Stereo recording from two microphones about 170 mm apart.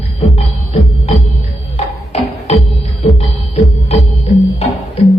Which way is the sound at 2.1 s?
40° left (ahead or behind).